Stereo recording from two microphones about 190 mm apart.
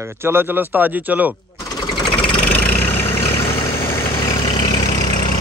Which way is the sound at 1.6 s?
20° left (ahead or behind).